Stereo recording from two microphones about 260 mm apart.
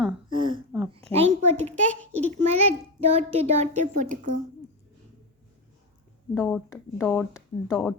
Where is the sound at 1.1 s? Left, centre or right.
Right.